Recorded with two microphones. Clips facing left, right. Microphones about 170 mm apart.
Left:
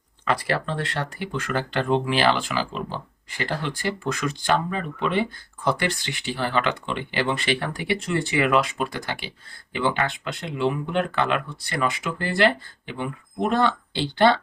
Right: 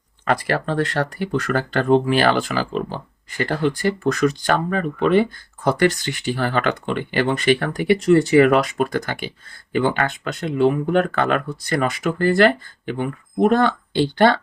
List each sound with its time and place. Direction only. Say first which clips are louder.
0.3 s speech: right 4 dB; 50° right (ahead or behind)